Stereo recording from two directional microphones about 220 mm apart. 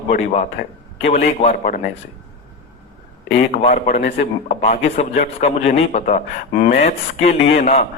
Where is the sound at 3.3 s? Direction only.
35° left (ahead or behind).